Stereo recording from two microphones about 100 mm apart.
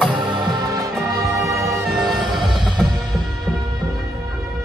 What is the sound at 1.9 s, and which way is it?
Music, 5° right (ahead or behind).